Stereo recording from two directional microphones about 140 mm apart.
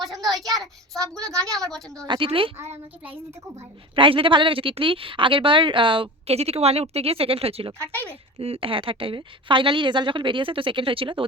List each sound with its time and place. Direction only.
0.3 s child singing: centre (ahead or behind)
1.5 s a woman's voice: 5° left (ahead or behind)
2.0 s a woman's voice: 35° right (ahead or behind)
2.7 s child singing: 15° right (ahead or behind)
3.9 s a woman's voice: 40° right (ahead or behind)